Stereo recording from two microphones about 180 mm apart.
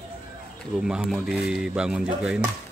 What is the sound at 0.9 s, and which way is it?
Speech, 5° right (ahead or behind).